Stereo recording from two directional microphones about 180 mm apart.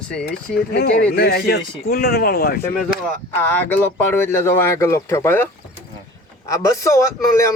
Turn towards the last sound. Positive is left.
turn(degrees=15)  # may be behind; listen again after turning